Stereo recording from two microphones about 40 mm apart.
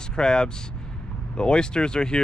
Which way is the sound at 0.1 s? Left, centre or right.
Centre.